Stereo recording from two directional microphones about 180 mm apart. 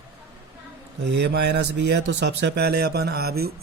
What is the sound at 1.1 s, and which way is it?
Speech, 70° right (ahead or behind).